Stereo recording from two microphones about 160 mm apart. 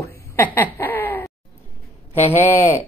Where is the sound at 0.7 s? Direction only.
10° left (ahead or behind).